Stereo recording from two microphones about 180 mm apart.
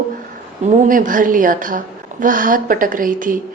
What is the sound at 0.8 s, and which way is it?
A woman's voice, 50° right (ahead or behind).